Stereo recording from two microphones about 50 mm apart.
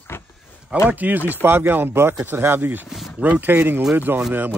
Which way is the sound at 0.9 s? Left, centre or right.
Right.